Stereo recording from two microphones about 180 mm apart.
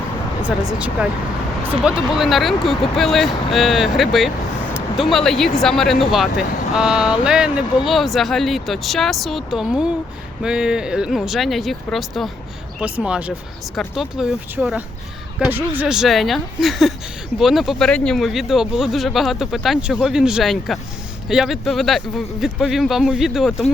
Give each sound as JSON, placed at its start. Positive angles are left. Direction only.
{"t": 0.4, "sound": "speech", "side_deg": -5}